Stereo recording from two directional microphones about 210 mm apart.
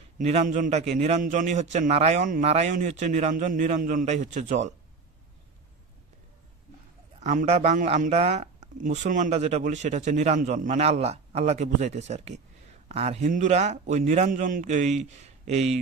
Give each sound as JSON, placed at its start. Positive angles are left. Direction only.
{"t": 0.2, "sound": "speech", "side_deg": -35}
{"t": 7.2, "sound": "speech", "side_deg": -35}